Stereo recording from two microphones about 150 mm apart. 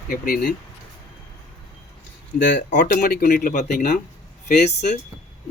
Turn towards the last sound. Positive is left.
turn(degrees=50)  # may be behind; listen again after turning